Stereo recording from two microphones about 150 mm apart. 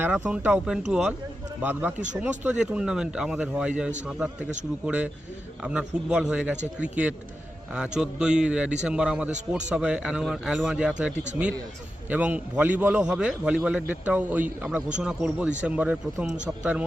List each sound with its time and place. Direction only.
0.0 s a man's voice: 10° right (ahead or behind)
5.6 s a man's voice: 5° right (ahead or behind)